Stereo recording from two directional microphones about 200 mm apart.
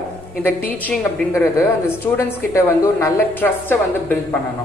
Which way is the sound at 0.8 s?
15° left (ahead or behind).